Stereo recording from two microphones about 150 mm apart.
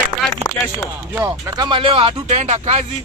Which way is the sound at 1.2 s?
25° right (ahead or behind).